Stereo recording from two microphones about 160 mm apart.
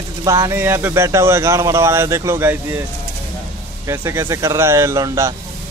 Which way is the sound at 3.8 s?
15° right (ahead or behind).